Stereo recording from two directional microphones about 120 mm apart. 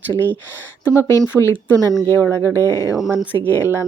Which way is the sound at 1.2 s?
20° left (ahead or behind).